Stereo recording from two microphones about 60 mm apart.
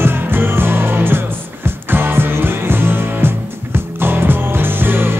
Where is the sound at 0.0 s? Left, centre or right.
Right.